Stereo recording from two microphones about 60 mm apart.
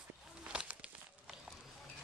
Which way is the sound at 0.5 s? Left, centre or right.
Centre.